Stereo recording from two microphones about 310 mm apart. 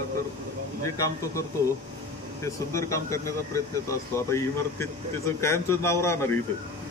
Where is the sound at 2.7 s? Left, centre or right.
Centre.